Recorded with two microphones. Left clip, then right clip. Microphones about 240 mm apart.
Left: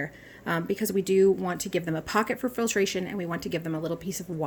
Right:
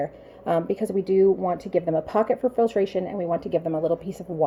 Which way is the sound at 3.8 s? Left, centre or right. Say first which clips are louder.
Right 8 dB; left.